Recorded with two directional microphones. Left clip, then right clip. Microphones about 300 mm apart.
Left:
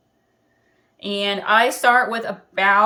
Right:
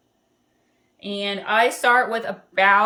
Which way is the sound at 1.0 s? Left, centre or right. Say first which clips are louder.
Left 4 dB; centre.